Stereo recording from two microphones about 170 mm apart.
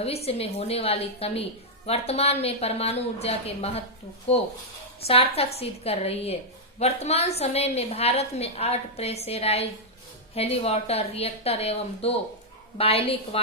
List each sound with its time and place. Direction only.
0.0 s a woman's voice: 35° left (ahead or behind)